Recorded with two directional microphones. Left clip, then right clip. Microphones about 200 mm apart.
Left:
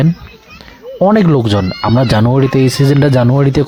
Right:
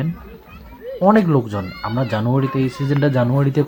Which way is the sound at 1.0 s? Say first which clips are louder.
Left 5 dB; 50° left (ahead or behind).